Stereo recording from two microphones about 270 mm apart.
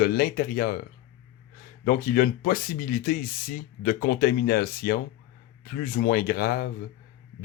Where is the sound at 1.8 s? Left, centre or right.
Left.